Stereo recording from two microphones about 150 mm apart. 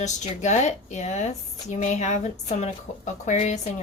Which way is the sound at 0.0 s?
50° left (ahead or behind).